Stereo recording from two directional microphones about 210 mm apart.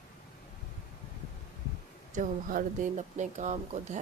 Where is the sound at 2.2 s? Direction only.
35° right (ahead or behind).